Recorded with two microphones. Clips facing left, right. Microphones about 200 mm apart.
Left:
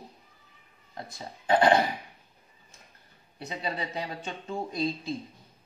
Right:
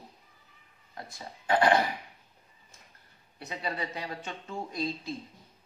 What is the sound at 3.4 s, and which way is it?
Speech, 20° left (ahead or behind).